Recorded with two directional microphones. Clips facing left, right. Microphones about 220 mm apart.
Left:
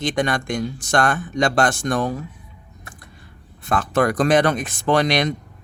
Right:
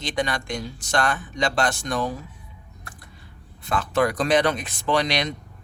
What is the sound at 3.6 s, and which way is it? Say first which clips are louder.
Speech: left 3 dB; 50° left (ahead or behind).